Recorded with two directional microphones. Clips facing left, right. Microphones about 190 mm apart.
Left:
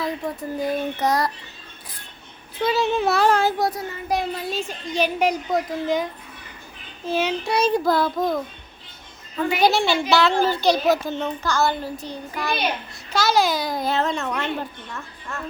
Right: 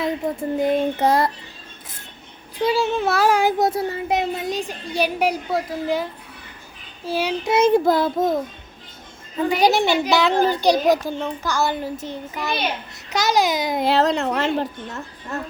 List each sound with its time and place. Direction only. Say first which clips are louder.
0.0 s child singing: right 4 dB; 25° right (ahead or behind)
2.6 s a child's voice: right 1 dB; 10° right (ahead or behind)
3.7 s a child's voice: right 4 dB; 25° right (ahead or behind)
7.5 s child singing: right 5 dB; 20° right (ahead or behind)
9.6 s a child's voice: right 1 dB; 15° right (ahead or behind)
11.4 s child singing: even; 15° right (ahead or behind); by 14.4 s 35° right (ahead or behind)
14.6 s speech: right 5 dB; 40° right (ahead or behind)